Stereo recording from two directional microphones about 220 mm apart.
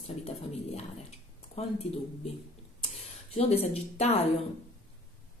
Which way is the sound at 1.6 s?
30° left (ahead or behind).